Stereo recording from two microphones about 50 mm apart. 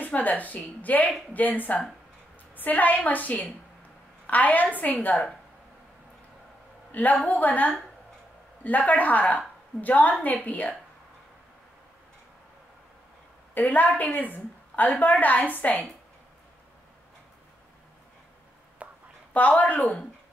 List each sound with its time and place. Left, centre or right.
0.0 s a woman's voice: left
6.9 s a woman's voice: left
13.6 s a woman's voice: left
18.8 s a sound: right
19.3 s a woman's voice: left